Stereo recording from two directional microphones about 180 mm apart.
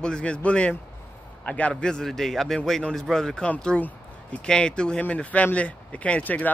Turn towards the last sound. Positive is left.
turn(degrees=10)  # may be behind; listen again after turning